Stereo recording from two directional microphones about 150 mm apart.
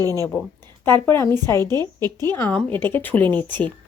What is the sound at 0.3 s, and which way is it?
Speech, 10° left (ahead or behind).